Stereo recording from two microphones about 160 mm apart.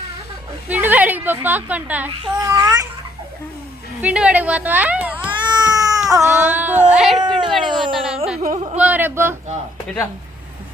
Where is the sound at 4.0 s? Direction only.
10° right (ahead or behind).